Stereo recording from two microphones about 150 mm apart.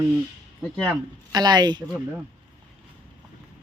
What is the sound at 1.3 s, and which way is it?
Speech, 30° right (ahead or behind).